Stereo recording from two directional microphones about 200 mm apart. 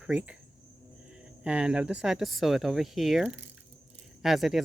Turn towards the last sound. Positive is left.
turn(degrees=0)  # may be behind; listen again after turning